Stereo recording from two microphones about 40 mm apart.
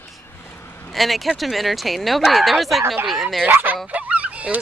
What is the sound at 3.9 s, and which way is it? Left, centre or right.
Fowl, right.